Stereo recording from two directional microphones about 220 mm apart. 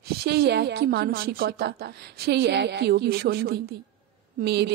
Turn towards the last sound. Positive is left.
turn(degrees=-50)  # may be behind; listen again after turning